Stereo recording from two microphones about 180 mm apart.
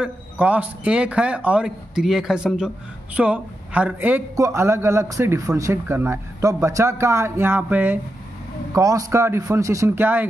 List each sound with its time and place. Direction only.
0.0 s a man's voice: 10° right (ahead or behind)